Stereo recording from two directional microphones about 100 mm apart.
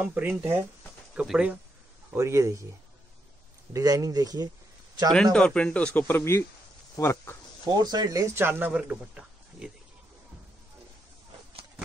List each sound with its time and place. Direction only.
0.0 s speech: 15° right (ahead or behind)
2.1 s speech: 35° right (ahead or behind)
3.7 s speech: 35° right (ahead or behind)
5.1 s speech: 10° left (ahead or behind); by 7.3 s 25° left (ahead or behind)
7.6 s speech: 45° right (ahead or behind)
8.4 s a man's voice: 20° right (ahead or behind)